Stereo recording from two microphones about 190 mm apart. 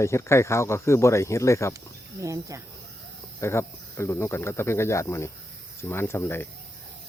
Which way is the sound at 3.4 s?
15° left (ahead or behind).